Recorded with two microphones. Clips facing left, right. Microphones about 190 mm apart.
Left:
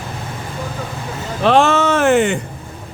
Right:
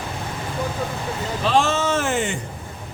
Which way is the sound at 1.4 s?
60° left (ahead or behind).